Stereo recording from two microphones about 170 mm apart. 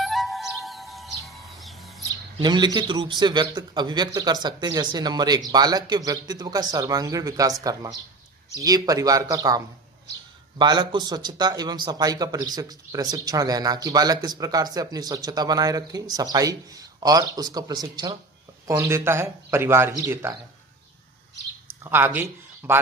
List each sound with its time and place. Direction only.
0.0 s music: centre (ahead or behind)
2.3 s speech: 25° right (ahead or behind)
10.6 s speech: 25° right (ahead or behind)
21.8 s speech: 15° right (ahead or behind)